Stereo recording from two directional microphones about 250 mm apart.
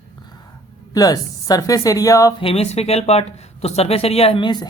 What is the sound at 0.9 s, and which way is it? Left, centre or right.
Speech, centre.